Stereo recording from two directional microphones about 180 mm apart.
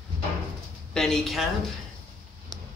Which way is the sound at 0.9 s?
5° left (ahead or behind).